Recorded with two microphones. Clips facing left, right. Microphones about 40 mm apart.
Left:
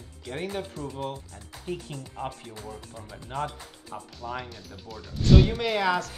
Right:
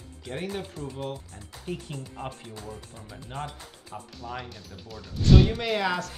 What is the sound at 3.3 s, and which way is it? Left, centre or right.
Speech, right.